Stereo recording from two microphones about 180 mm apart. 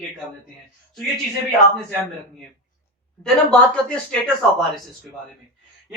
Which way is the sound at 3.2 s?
5° left (ahead or behind).